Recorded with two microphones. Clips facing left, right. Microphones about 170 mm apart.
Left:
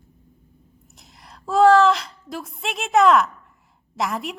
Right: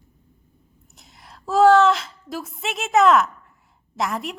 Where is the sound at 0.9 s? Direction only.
Centre (ahead or behind).